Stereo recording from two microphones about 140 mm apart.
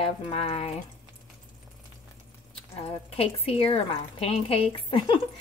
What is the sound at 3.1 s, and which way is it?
Speech, 45° left (ahead or behind).